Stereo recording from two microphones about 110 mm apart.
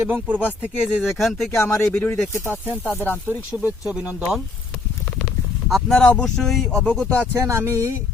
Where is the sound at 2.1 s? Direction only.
25° left (ahead or behind).